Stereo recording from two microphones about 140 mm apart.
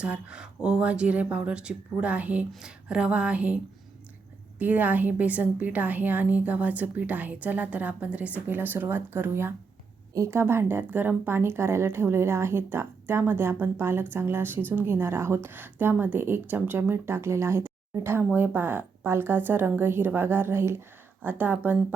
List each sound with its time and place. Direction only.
0.0 s a woman's voice: 5° right (ahead or behind)
4.6 s a woman's voice: 10° right (ahead or behind)